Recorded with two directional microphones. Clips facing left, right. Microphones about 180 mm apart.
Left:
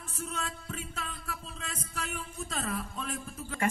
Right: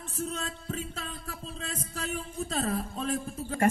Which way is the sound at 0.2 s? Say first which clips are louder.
Right 3 dB; 35° right (ahead or behind).